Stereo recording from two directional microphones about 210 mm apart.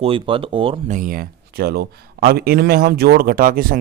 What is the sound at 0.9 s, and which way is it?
Speech, 40° right (ahead or behind).